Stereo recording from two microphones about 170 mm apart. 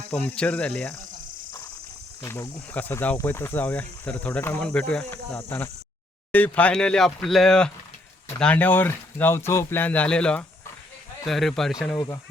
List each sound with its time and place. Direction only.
0.1 s speech: 10° left (ahead or behind)
2.2 s speech: 15° left (ahead or behind)
11.9 s speech: 20° left (ahead or behind)